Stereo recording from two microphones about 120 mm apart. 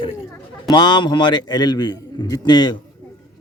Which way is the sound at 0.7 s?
35° left (ahead or behind).